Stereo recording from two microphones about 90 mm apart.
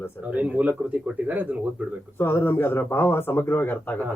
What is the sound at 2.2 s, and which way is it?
Speech, 25° left (ahead or behind).